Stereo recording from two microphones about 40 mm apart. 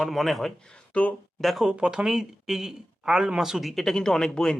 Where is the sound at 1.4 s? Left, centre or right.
Centre.